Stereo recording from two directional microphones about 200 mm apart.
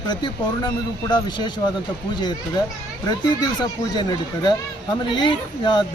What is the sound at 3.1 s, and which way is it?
Speech, 20° left (ahead or behind).